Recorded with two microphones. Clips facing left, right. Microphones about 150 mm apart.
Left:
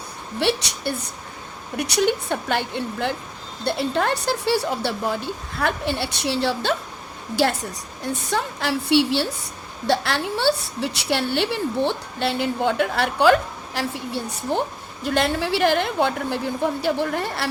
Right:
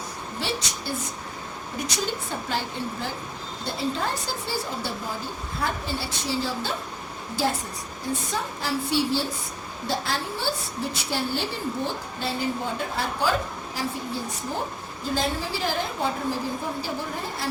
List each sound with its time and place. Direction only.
0.3 s a woman's voice: 65° left (ahead or behind)
8.3 s a woman's voice: 75° left (ahead or behind)